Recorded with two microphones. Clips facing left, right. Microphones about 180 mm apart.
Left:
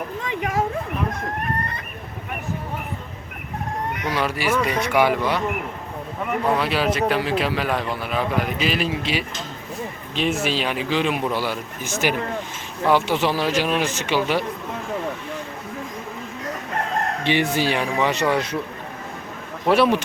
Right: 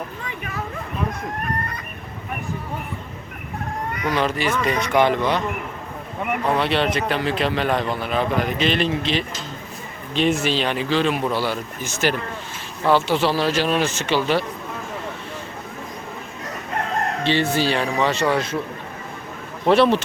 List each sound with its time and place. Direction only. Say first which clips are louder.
0.3 s a sound: left 7 dB; 90° left
4.2 s a man's voice: left 1 dB; 10° left (ahead or behind)
6.6 s a man's voice: even; 5° left (ahead or behind)
17.2 s a man's voice: right 1 dB; 15° left (ahead or behind)
19.6 s a man's voice: right 2 dB; 10° left (ahead or behind)